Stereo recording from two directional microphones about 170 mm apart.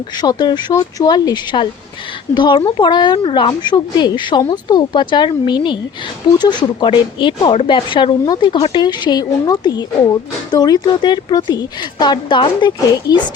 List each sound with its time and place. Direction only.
0.2 s a woman's voice: 25° left (ahead or behind)